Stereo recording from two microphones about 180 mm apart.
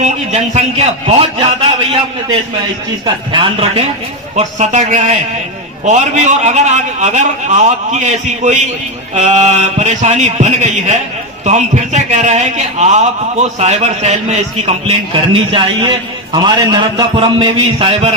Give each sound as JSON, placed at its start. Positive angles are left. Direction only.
{"t": 0.0, "sound": "a man's voice", "side_deg": -40}
{"t": 4.4, "sound": "a man's voice", "side_deg": -40}